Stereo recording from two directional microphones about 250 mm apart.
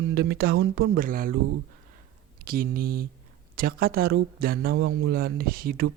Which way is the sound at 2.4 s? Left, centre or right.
Right.